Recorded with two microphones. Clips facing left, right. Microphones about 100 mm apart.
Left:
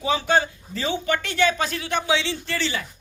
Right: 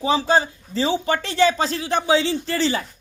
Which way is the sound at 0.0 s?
30° right (ahead or behind).